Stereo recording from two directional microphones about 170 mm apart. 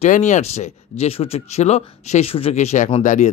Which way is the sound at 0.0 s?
45° left (ahead or behind).